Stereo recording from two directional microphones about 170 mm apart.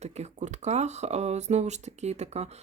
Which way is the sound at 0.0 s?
45° right (ahead or behind).